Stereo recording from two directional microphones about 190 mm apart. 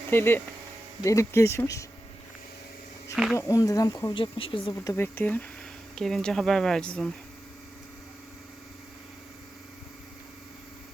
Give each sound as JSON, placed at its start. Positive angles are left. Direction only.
{"t": 0.1, "sound": "speech", "side_deg": 10}
{"t": 3.3, "sound": "speech", "side_deg": 15}
{"t": 4.7, "sound": "speech", "side_deg": 15}